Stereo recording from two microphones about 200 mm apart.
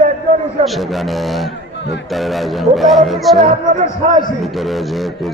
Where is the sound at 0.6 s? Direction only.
Centre (ahead or behind).